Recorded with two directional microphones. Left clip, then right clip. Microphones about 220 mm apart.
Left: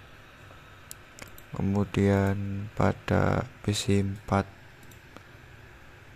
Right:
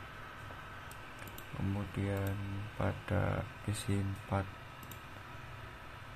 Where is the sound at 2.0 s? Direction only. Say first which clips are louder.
Left 12 dB; 45° left (ahead or behind).